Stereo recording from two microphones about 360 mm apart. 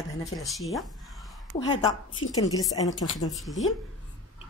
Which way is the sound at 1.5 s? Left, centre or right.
Centre.